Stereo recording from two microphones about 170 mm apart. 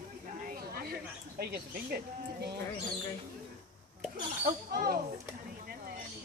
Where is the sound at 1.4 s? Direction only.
70° right (ahead or behind).